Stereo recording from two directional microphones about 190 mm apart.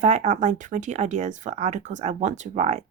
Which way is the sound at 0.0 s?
35° right (ahead or behind).